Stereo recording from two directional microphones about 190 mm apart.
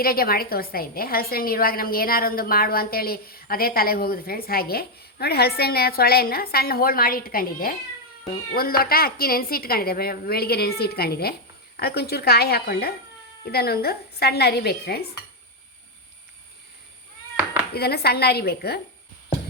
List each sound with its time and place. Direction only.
0.0 s a woman's voice: 50° left (ahead or behind)
17.7 s a woman's voice: 55° left (ahead or behind)